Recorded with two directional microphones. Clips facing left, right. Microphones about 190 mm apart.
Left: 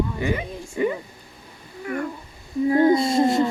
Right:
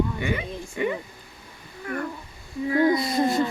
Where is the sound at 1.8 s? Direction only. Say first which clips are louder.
Left 3 dB; 10° left (ahead or behind).